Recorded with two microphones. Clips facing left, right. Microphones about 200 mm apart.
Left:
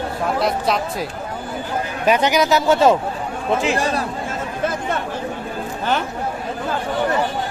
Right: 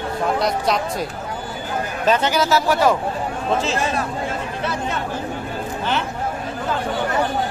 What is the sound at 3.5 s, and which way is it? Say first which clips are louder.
Speech: left 3 dB; 15° left (ahead or behind).